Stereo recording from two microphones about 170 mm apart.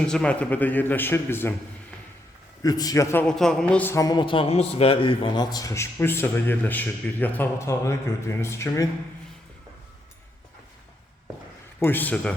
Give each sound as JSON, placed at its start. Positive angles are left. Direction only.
{"t": 0.1, "sound": "a man's voice", "side_deg": 5}
{"t": 2.6, "sound": "a man's voice", "side_deg": 20}
{"t": 3.2, "sound": "a man's voice", "side_deg": 0}
{"t": 11.8, "sound": "a man's voice", "side_deg": 10}